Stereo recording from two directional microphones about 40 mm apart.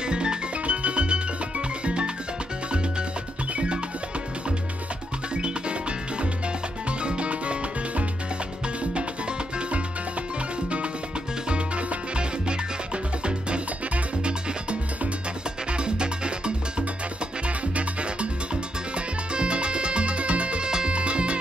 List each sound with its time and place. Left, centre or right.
0.0 s music: right
3.5 s music: right
5.3 s music: right
9.6 s music: right
11.4 s music: right